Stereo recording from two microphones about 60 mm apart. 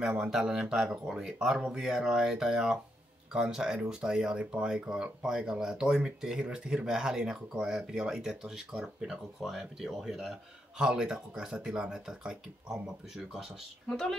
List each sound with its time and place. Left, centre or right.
0.2 s speech: centre
4.4 s speech: right
4.6 s speech: centre
8.8 s speech: centre
13.8 s speech: centre